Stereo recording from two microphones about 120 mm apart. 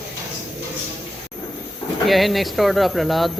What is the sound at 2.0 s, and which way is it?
Speech, centre (ahead or behind).